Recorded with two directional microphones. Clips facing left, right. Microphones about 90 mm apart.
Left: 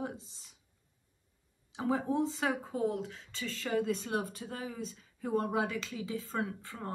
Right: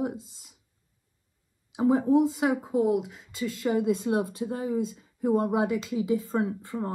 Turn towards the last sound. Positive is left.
turn(degrees=-20)  # may be behind; listen again after turning